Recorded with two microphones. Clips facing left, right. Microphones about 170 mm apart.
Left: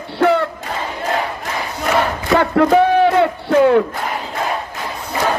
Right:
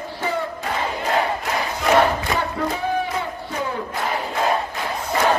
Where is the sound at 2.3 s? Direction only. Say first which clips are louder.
Left 11 dB; 80° left.